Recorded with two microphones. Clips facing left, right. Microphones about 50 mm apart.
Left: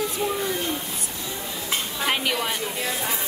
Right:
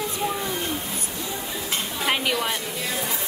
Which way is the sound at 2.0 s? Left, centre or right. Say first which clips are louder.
Right 1 dB; centre.